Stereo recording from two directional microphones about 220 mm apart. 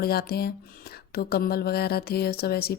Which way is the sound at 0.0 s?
45° left (ahead or behind).